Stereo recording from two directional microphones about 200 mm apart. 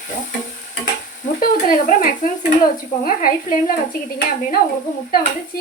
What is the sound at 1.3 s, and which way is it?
A woman's voice, 40° left (ahead or behind).